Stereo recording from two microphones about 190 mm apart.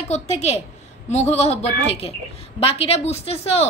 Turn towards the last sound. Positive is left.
turn(degrees=35)  # may be behind; listen again after turning